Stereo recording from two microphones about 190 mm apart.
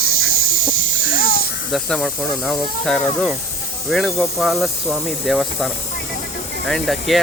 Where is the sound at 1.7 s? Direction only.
5° left (ahead or behind).